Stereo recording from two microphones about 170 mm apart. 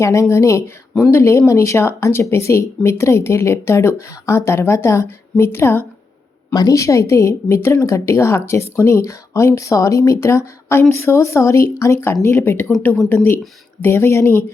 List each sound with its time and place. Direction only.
0.0 s speech: 15° left (ahead or behind)
13.8 s speech: 15° left (ahead or behind)